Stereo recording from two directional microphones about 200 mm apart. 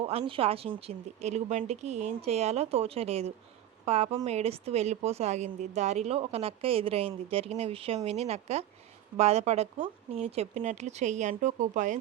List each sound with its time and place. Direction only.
0.0 s speech: 30° right (ahead or behind)